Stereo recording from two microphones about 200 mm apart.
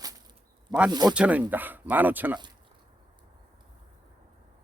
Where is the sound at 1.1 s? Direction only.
5° right (ahead or behind).